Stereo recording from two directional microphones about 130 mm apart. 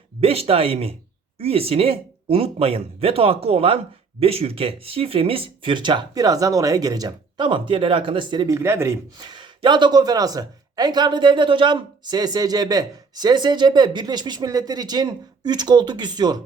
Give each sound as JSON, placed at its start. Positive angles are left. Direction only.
{"t": 0.2, "sound": "speech", "side_deg": -50}
{"t": 8.5, "sound": "speech", "side_deg": -20}
{"t": 9.1, "sound": "speech", "side_deg": -35}